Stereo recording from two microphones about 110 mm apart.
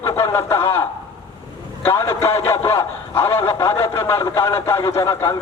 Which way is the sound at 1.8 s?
20° left (ahead or behind).